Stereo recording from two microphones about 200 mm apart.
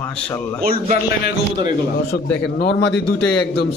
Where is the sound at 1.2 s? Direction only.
50° left (ahead or behind).